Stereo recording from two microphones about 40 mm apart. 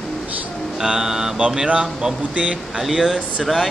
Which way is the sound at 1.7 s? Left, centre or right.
Right.